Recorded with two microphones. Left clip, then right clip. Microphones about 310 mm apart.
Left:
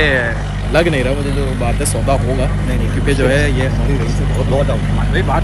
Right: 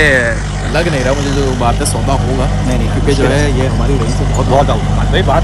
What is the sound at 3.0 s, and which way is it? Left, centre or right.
Speech, centre.